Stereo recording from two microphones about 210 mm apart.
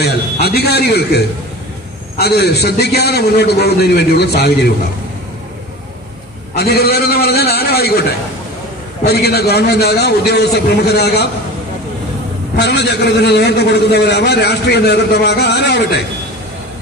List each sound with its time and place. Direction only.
0.0 s a man's voice: 50° left (ahead or behind)
6.5 s a man's voice: 50° left (ahead or behind)
9.0 s a man's voice: 50° left (ahead or behind)
12.5 s a man's voice: 55° left (ahead or behind)